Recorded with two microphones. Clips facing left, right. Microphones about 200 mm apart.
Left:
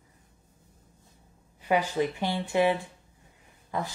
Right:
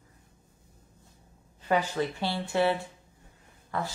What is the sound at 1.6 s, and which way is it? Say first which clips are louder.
A woman's voice: left 2 dB; 10° left (ahead or behind).